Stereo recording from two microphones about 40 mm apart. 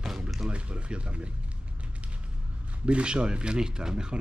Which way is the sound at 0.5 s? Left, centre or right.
Right.